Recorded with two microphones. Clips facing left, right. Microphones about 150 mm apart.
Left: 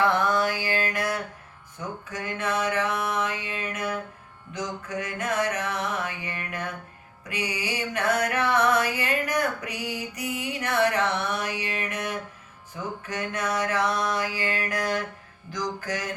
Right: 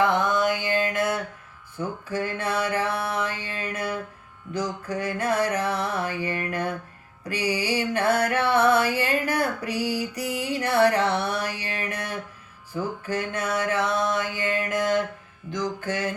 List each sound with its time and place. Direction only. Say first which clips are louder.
0.0 s mantra: right 1 dB; 20° right (ahead or behind)
1.8 s a sound: right 6 dB; 30° right (ahead or behind)
12.7 s mantra: right 5 dB; 30° right (ahead or behind)